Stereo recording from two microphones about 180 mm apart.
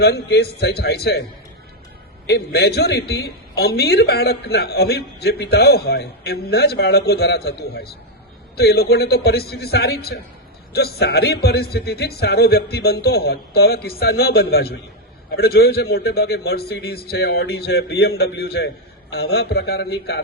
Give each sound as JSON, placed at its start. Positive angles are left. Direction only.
{"t": 0.0, "sound": "a man's voice", "side_deg": 65}
{"t": 2.2, "sound": "a man's voice", "side_deg": 65}